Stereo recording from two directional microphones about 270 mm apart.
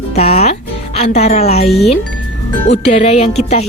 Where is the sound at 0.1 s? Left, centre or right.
Left.